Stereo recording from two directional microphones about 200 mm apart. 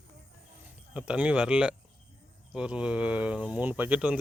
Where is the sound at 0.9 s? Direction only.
5° right (ahead or behind).